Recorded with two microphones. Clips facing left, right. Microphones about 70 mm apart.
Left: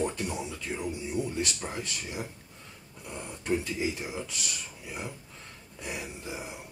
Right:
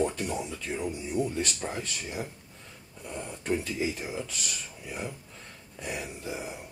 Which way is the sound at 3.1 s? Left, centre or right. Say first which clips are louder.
Even; centre.